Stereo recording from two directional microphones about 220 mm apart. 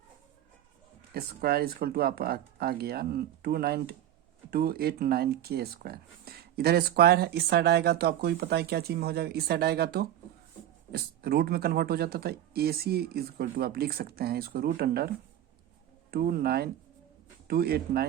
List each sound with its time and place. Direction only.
1.1 s speech: 45° right (ahead or behind)
16.1 s speech: 45° right (ahead or behind)